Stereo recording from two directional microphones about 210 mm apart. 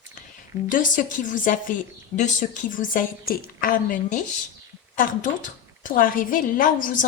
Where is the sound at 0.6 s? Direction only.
40° left (ahead or behind).